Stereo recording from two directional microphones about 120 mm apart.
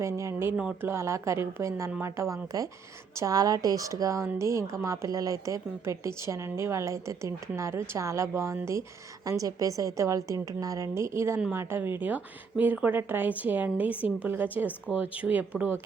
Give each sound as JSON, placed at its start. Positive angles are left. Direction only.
{"t": 0.0, "sound": "a woman's voice", "side_deg": -25}